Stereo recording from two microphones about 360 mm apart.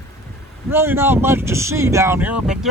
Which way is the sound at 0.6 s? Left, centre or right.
Centre.